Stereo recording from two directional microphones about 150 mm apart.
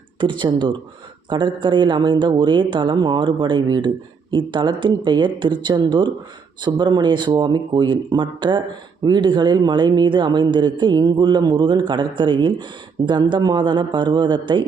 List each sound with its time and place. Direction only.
0.2 s a man's voice: 30° right (ahead or behind)